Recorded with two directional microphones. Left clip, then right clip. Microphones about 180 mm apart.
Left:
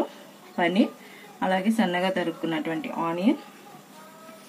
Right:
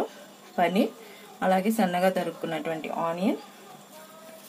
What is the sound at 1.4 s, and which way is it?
Speech, 40° right (ahead or behind).